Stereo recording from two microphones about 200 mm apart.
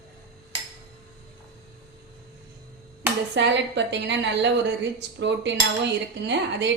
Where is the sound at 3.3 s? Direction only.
60° right (ahead or behind).